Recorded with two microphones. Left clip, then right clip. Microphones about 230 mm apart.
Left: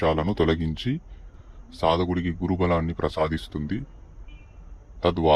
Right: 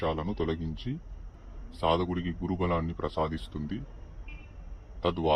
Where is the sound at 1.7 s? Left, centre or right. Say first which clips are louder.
Left 5 dB; left.